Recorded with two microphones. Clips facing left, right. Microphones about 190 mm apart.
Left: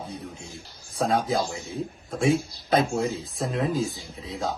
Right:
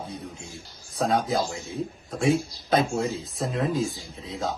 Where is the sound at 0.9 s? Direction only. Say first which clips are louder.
Even; centre (ahead or behind).